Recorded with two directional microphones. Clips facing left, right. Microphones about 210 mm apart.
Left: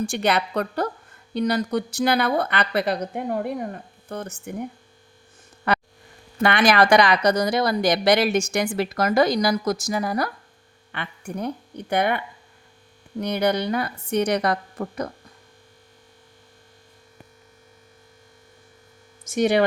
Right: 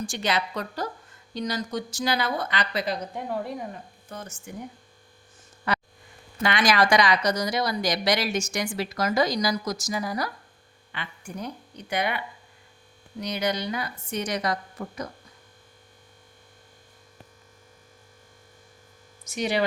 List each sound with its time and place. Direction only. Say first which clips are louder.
0.0 s a woman's voice: left 5 dB; 60° left (ahead or behind)
5.7 s quack: left 5 dB; 60° left (ahead or behind)
6.4 s a woman's voice: left 4 dB; 60° left (ahead or behind)
19.2 s speech: left 7 dB; 50° left (ahead or behind)